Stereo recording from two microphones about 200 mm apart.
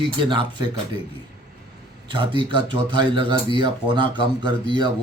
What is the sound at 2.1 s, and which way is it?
Speech, 25° right (ahead or behind).